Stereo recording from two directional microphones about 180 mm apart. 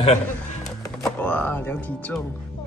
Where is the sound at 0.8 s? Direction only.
15° left (ahead or behind).